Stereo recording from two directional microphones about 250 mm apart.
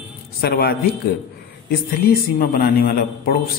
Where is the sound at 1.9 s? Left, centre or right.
Left.